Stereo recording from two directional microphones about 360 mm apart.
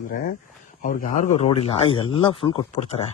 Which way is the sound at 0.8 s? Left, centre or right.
Left.